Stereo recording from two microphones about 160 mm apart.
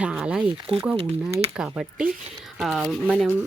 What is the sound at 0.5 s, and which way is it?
Speech, 35° right (ahead or behind).